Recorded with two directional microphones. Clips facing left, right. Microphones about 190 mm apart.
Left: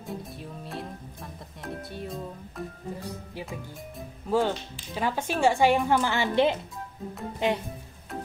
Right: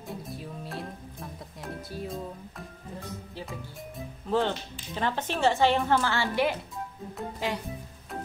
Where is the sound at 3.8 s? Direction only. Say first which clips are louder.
Even; 5° left (ahead or behind); by 7.6 s 20° left (ahead or behind).